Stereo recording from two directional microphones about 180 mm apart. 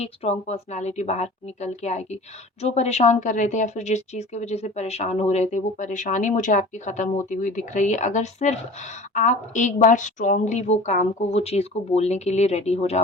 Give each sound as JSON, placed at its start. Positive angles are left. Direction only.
{"t": 0.0, "sound": "a woman's voice", "side_deg": 35}